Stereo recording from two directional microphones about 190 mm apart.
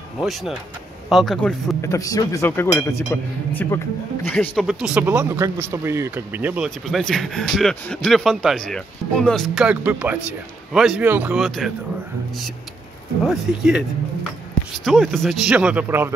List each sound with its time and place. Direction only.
0.2 s speech: centre (ahead or behind)
1.8 s speech: 15° left (ahead or behind)
4.3 s speech: 5° left (ahead or behind)
4.6 s speech: 5° right (ahead or behind)
13.2 s speech: centre (ahead or behind)
14.9 s speech: centre (ahead or behind)